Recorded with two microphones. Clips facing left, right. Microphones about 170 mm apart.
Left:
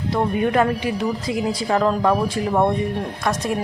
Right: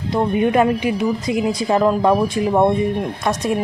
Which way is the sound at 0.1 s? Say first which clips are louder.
Right 3 dB; 20° right (ahead or behind).